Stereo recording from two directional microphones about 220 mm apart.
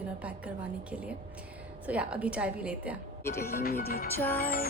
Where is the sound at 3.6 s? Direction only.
45° left (ahead or behind).